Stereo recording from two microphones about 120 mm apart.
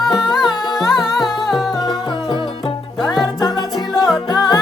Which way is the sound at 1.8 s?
40° left (ahead or behind).